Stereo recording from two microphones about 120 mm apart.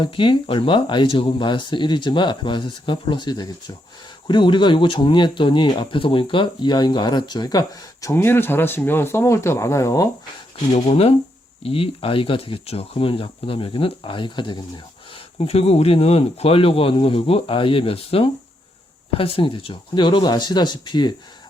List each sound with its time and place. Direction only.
0.0 s speech: 45° left (ahead or behind)
8.1 s speech: 20° left (ahead or behind)
10.8 s speech: 55° left (ahead or behind); by 14.6 s 40° left (ahead or behind)
15.1 s speech: 60° left (ahead or behind); by 21.1 s 40° left (ahead or behind)